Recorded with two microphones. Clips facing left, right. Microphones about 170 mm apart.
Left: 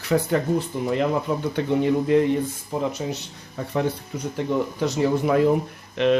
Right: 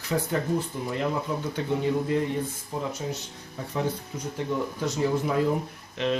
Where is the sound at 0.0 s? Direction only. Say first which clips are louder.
Left 6 dB; 70° left (ahead or behind).